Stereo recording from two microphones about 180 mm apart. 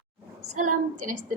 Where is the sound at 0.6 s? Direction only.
45° right (ahead or behind).